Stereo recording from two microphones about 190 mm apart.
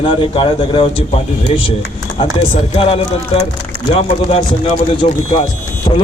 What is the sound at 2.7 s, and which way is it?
A man's voice, 30° left (ahead or behind).